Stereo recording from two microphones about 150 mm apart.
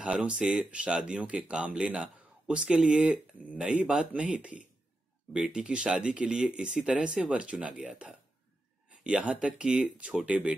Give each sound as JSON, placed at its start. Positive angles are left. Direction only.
{"t": 0.0, "sound": "speech", "side_deg": -5}